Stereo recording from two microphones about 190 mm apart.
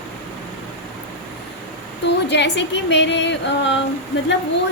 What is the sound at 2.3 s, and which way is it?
A woman's voice, 65° left (ahead or behind).